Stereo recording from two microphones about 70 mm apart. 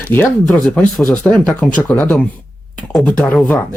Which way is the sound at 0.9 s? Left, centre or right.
Centre.